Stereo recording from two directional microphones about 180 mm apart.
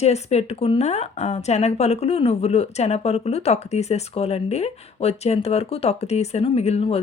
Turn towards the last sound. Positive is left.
turn(degrees=35)  # may be behind; listen again after turning